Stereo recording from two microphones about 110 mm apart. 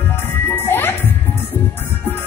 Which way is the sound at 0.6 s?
20° left (ahead or behind).